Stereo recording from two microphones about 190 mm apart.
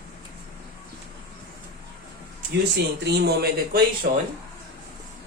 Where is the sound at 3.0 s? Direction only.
60° right (ahead or behind).